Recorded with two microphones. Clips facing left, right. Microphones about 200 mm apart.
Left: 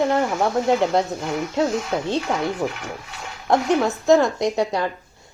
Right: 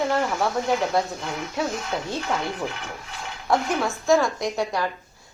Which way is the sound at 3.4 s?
20° left (ahead or behind).